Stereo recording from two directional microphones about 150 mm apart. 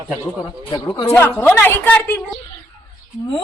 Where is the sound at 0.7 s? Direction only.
20° left (ahead or behind).